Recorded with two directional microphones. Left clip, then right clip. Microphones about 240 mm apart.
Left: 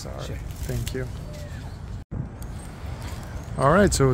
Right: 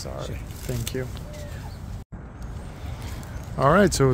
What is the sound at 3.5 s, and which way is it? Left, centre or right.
Speech, centre.